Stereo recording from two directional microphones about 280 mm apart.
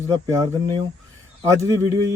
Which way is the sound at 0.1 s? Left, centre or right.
Centre.